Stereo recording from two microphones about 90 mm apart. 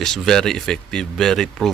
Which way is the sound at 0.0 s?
5° left (ahead or behind).